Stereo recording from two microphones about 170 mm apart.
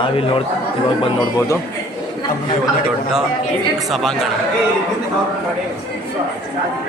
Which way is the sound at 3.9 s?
Centre (ahead or behind).